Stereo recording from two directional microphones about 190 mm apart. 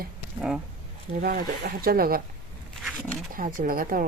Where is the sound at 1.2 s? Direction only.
55° right (ahead or behind).